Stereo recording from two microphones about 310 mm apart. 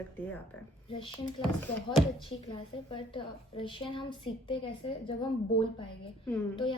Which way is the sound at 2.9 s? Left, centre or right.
Centre.